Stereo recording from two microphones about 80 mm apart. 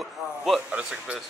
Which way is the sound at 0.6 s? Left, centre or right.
Centre.